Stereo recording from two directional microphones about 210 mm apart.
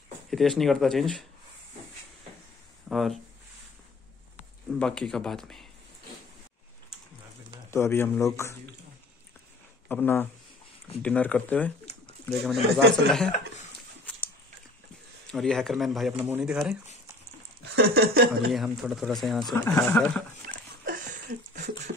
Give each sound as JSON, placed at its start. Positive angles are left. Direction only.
{"t": 0.3, "sound": "speech", "side_deg": 0}
{"t": 2.9, "sound": "speech", "side_deg": 0}
{"t": 4.6, "sound": "speech", "side_deg": 5}
{"t": 7.7, "sound": "a man's voice", "side_deg": 10}
{"t": 9.8, "sound": "a man's voice", "side_deg": 10}
{"t": 14.1, "sound": "a sound", "side_deg": 5}
{"t": 15.2, "sound": "speech", "side_deg": 5}
{"t": 17.7, "sound": "a sound", "side_deg": -50}
{"t": 18.5, "sound": "speech", "side_deg": 0}
{"t": 20.8, "sound": "a sound", "side_deg": -40}